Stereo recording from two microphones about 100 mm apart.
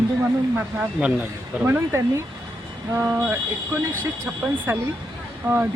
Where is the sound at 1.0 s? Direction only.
10° right (ahead or behind).